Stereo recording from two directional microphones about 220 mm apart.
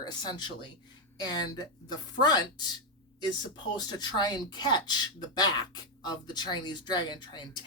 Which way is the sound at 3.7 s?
20° left (ahead or behind).